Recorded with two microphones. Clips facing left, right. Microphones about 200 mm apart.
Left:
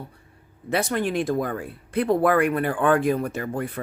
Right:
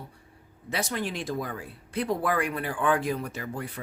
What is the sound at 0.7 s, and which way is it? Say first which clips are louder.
Speech: left 7 dB; 55° left (ahead or behind).